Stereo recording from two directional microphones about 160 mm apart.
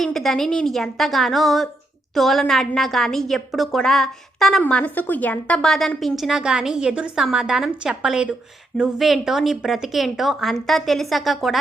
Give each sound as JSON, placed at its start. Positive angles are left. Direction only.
{"t": 0.0, "sound": "a woman's voice", "side_deg": 0}